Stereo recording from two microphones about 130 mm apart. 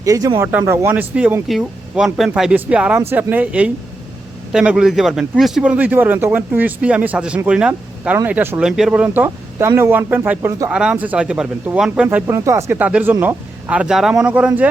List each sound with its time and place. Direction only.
0.0 s speech: 25° right (ahead or behind)
0.3 s speech: 15° right (ahead or behind)